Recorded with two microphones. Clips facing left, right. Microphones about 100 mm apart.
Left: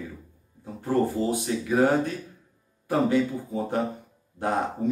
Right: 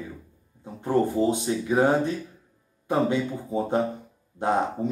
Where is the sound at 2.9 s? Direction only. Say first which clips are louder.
Left 1 dB; 20° right (ahead or behind).